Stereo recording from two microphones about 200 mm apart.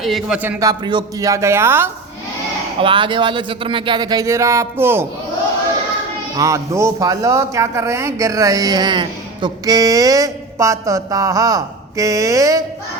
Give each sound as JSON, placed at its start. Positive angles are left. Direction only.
{"t": 0.0, "sound": "speech", "side_deg": 0}
{"t": 2.8, "sound": "speech", "side_deg": -25}
{"t": 6.3, "sound": "speech", "side_deg": -15}